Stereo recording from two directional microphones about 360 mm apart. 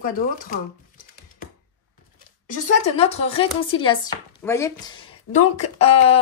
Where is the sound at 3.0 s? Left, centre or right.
Centre.